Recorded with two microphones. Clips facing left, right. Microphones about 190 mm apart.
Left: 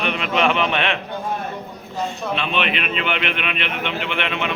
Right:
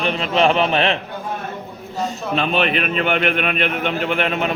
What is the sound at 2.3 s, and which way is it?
A man's voice, 40° right (ahead or behind).